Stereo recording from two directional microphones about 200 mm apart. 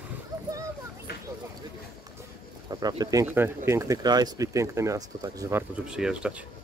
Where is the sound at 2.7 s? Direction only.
20° right (ahead or behind); by 6.4 s 5° right (ahead or behind).